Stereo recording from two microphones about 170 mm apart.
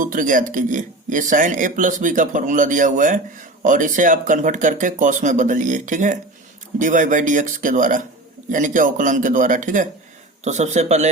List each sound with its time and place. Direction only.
0.0 s speech: 50° right (ahead or behind)